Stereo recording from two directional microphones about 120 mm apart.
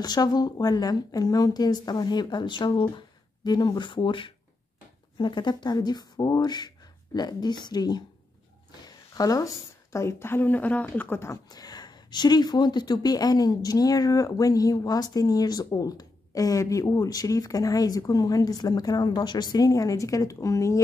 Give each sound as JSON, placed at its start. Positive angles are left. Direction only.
{"t": 0.0, "sound": "speech", "side_deg": 35}
{"t": 8.8, "sound": "a sound", "side_deg": 30}
{"t": 9.9, "sound": "a woman's voice", "side_deg": 20}
{"t": 11.4, "sound": "speech", "side_deg": 35}